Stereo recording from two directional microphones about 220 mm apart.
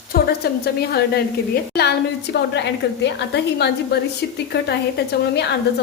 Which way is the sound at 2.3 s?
50° left (ahead or behind).